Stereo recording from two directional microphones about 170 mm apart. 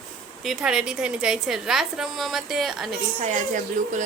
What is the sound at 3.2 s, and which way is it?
Speech, 45° right (ahead or behind).